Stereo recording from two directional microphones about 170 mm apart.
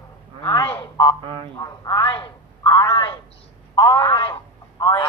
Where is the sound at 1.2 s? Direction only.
30° right (ahead or behind).